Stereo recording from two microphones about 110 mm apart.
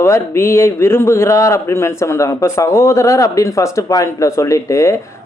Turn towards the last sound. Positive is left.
turn(degrees=30)  # may be behind; listen again after turning